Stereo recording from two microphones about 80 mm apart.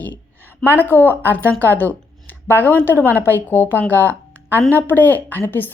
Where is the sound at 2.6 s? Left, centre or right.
Left.